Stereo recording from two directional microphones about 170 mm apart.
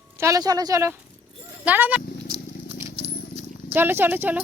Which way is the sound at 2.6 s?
15° right (ahead or behind).